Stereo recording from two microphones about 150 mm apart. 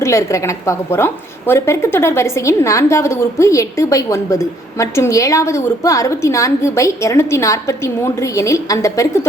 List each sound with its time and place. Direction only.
0.0 s a woman's voice: 20° left (ahead or behind)